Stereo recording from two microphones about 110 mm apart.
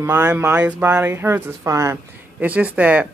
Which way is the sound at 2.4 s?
15° right (ahead or behind).